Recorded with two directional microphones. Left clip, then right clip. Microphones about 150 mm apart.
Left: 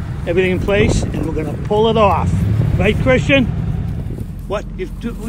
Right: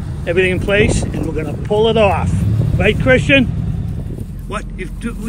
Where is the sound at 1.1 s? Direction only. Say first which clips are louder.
Even; 50° right (ahead or behind).